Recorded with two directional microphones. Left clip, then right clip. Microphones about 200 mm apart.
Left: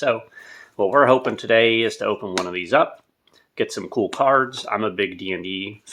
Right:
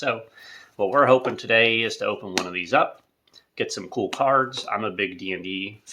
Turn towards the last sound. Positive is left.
turn(degrees=50)  # may be behind; listen again after turning